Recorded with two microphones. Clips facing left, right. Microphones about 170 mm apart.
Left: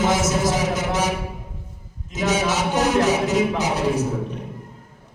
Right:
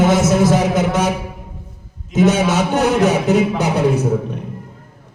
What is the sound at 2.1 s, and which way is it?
A man's voice, 55° right (ahead or behind).